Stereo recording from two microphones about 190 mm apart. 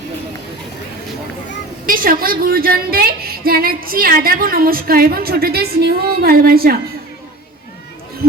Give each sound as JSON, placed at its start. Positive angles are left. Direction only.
{"t": 1.9, "sound": "a woman's voice", "side_deg": -50}